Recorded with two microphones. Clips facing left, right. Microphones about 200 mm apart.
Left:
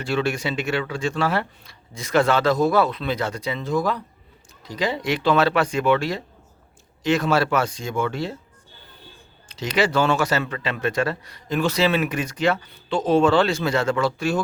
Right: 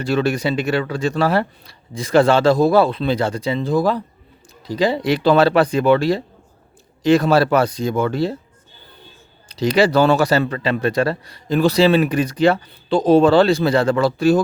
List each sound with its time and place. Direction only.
0.0 s speech: 40° right (ahead or behind)
9.5 s speech: 35° right (ahead or behind)